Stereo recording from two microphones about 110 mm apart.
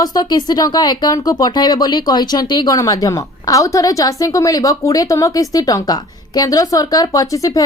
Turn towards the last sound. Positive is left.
turn(degrees=30)  # may be behind; listen again after turning